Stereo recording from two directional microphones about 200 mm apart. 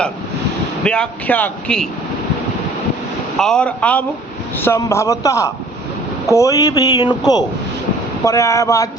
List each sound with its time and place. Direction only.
0.9 s speech: 5° left (ahead or behind)
3.3 s a man's voice: 5° left (ahead or behind)